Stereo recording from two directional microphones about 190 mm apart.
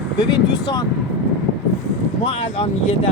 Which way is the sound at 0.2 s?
25° left (ahead or behind).